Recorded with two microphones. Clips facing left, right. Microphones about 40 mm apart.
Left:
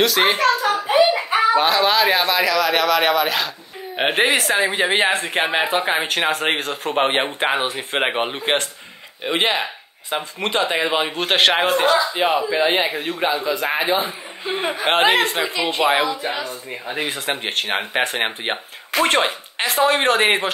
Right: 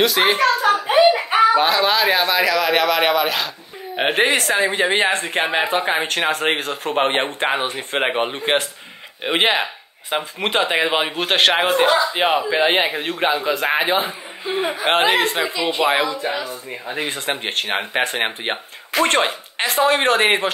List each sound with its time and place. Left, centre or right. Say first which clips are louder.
0.0 s speech: right 1 dB; centre
0.6 s a sound: right 3 dB; centre
0.9 s hands: right 1 dB; centre
1.6 s speech: even; centre
9.2 s speech: right 2 dB; right
11.1 s speech: even; centre
11.6 s speech: right 1 dB; centre
12.4 s speech: right 1 dB; right
14.5 s speech: right 1 dB; centre